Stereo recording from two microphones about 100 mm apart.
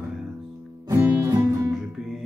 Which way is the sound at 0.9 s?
30° right (ahead or behind).